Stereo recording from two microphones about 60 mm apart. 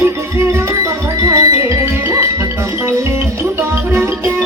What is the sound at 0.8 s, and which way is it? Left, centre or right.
Music, right.